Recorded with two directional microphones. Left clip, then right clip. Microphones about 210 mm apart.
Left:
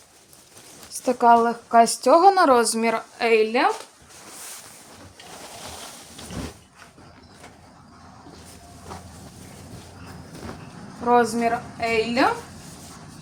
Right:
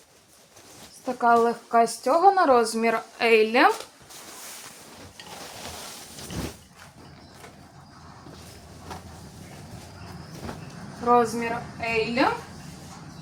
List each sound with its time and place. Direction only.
1.0 s speech: 45° left (ahead or behind); by 3.0 s 20° left (ahead or behind)
3.2 s a woman's voice: centre (ahead or behind)
3.4 s speech: 15° right (ahead or behind)
11.0 s a woman's voice: 50° left (ahead or behind)